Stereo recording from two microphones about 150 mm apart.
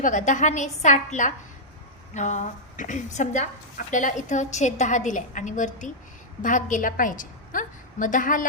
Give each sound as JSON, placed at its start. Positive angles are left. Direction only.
{"t": 0.0, "sound": "a woman's voice", "side_deg": 55}